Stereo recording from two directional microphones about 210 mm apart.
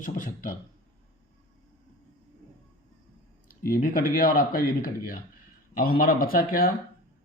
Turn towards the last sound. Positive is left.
turn(degrees=45)  # may be behind; listen again after turning